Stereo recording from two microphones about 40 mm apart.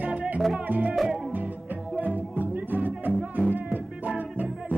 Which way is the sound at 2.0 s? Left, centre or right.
Right.